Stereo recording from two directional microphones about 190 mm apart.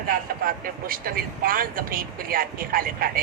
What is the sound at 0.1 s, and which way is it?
Speech, 50° right (ahead or behind).